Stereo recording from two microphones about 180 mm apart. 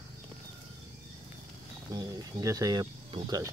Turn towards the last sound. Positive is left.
turn(degrees=-20)  # may be behind; listen again after turning